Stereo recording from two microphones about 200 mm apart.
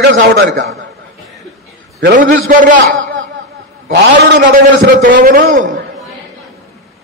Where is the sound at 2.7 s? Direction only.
75° right (ahead or behind).